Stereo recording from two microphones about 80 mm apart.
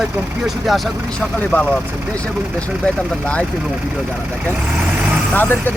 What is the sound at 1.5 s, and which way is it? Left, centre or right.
Speech, centre.